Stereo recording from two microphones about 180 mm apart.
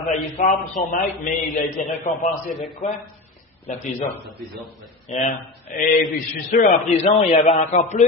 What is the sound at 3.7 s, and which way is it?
A man's voice, 40° left (ahead or behind).